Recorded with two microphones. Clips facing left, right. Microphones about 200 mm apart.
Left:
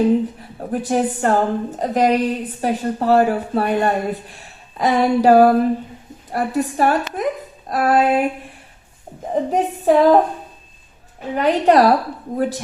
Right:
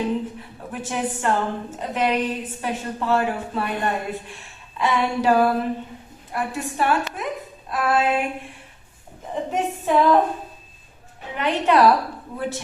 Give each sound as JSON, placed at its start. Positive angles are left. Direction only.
{"t": 0.6, "sound": "a woman's voice", "side_deg": 40}
{"t": 9.3, "sound": "a woman's voice", "side_deg": 40}
{"t": 11.3, "sound": "a woman's voice", "side_deg": 40}